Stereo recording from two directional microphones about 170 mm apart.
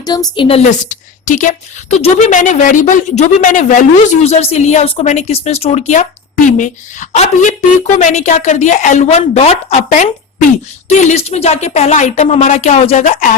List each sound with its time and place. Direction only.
0.0 s a woman's voice: 25° left (ahead or behind); by 13.3 s 45° left (ahead or behind)